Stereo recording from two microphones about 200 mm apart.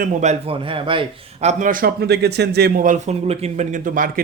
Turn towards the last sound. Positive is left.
turn(degrees=-45)  # may be behind; listen again after turning